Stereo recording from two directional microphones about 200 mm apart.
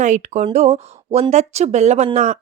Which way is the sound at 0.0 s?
35° right (ahead or behind).